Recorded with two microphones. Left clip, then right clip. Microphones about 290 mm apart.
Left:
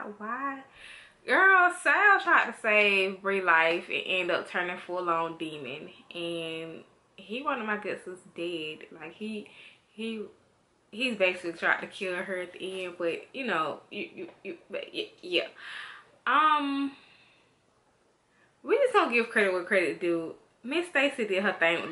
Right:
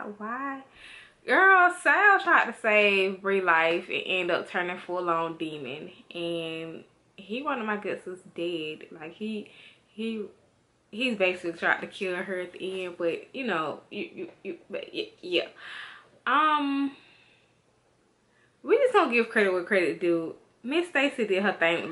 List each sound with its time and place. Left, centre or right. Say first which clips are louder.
0.0 s a woman's voice: even; centre
18.6 s a woman's voice: right 2 dB; centre